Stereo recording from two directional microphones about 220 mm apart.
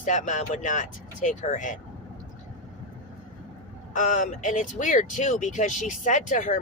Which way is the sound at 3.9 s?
35° left (ahead or behind).